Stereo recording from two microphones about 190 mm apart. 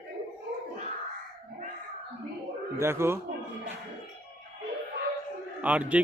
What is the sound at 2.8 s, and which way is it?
Speech, 15° right (ahead or behind).